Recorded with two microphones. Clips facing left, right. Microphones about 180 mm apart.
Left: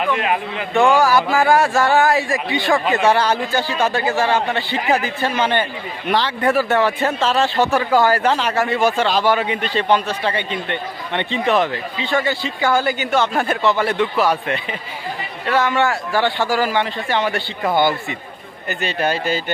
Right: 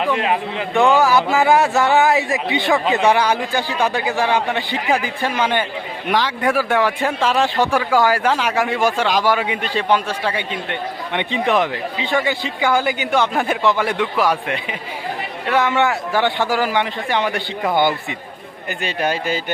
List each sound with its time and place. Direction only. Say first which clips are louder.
0.0 s a man's voice: right 1 dB; 25° right (ahead or behind); by 19.4 s 10° right (ahead or behind)